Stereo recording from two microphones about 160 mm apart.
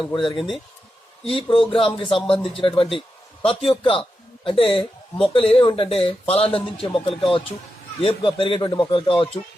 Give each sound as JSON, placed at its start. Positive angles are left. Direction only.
{"t": 0.1, "sound": "speech", "side_deg": 30}